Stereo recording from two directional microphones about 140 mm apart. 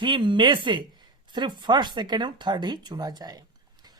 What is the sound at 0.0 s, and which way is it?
Speech, 35° right (ahead or behind).